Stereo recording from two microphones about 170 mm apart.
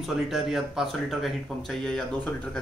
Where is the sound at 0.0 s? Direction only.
Centre (ahead or behind).